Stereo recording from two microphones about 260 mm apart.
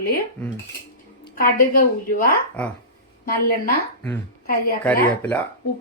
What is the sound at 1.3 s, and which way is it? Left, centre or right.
A woman's voice, left.